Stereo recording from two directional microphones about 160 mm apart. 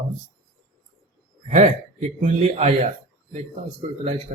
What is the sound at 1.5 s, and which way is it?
A man's voice, 50° right (ahead or behind).